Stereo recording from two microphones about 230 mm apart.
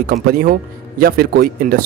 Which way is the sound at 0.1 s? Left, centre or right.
Right.